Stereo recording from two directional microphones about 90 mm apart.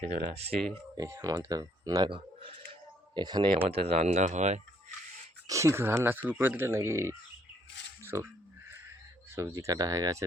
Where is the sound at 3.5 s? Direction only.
90° right.